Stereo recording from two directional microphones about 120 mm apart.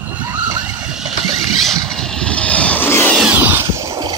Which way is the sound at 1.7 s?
5° left (ahead or behind).